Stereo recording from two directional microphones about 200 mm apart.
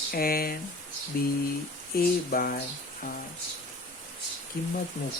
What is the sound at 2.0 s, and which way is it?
Speech, 45° left (ahead or behind).